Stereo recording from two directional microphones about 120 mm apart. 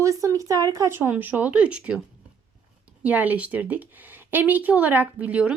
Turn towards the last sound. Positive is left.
turn(degrees=-10)  # may be behind; listen again after turning